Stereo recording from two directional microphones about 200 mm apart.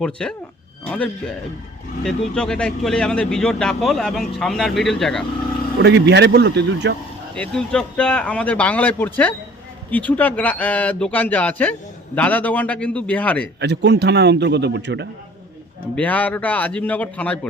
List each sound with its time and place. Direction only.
0.0 s speech: 5° left (ahead or behind)
5.8 s a man's voice: 60° right (ahead or behind)
7.3 s speech: 5° left (ahead or behind)
13.6 s a man's voice: 55° right (ahead or behind)
16.0 s speech: 5° left (ahead or behind)